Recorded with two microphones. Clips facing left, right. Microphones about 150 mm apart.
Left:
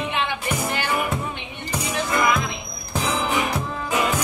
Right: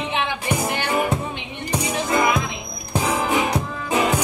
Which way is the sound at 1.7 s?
20° right (ahead or behind).